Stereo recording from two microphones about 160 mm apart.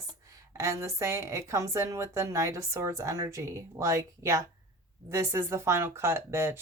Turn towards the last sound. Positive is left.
turn(degrees=-15)  # may be behind; listen again after turning